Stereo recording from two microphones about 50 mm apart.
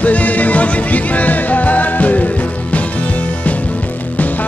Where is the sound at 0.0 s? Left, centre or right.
Left.